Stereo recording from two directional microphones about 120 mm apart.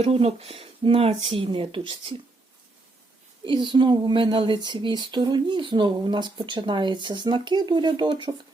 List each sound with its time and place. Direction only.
0.0 s speech: 55° right (ahead or behind)
3.4 s speech: 40° right (ahead or behind)